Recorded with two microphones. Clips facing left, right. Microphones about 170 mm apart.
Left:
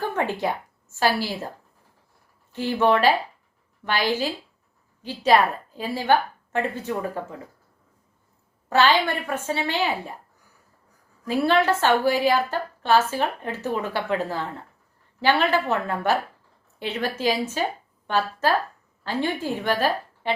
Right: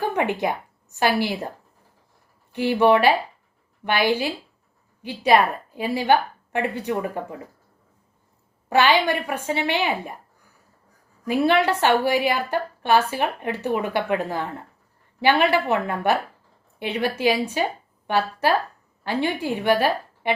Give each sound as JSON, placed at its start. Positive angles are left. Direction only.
{"t": 0.0, "sound": "a woman's voice", "side_deg": -15}
{"t": 2.5, "sound": "a woman's voice", "side_deg": -15}
{"t": 8.7, "sound": "a woman's voice", "side_deg": -15}
{"t": 11.3, "sound": "a woman's voice", "side_deg": -15}